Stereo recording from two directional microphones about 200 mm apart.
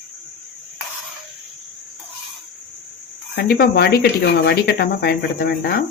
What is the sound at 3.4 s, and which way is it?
Speech, 50° left (ahead or behind).